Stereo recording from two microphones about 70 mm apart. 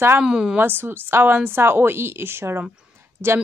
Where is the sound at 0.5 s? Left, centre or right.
Right.